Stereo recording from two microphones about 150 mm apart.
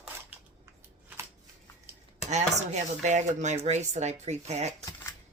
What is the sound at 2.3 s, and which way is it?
Speech, 50° right (ahead or behind).